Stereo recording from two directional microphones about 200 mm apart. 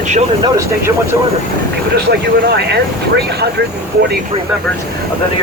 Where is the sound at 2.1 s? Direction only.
55° right (ahead or behind).